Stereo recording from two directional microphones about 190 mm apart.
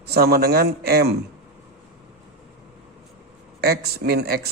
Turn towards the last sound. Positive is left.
turn(degrees=-55)  # may be behind; listen again after turning